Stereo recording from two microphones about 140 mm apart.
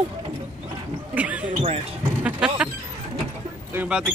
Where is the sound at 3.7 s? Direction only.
10° right (ahead or behind).